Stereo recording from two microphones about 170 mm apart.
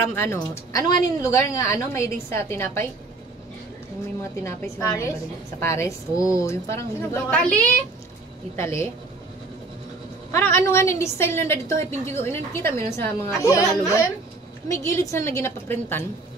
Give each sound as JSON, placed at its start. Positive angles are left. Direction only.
{"t": 0.2, "sound": "a woman's voice", "side_deg": 15}
{"t": 4.2, "sound": "a woman's voice", "side_deg": 15}
{"t": 10.3, "sound": "a woman's voice", "side_deg": 15}